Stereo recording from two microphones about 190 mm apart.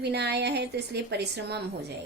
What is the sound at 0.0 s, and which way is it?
A woman's voice, 60° right (ahead or behind).